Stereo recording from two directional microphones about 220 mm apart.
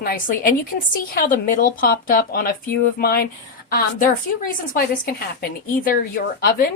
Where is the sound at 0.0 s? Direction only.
40° left (ahead or behind).